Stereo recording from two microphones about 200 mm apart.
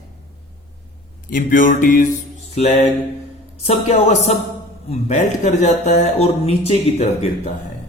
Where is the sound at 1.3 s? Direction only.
40° left (ahead or behind).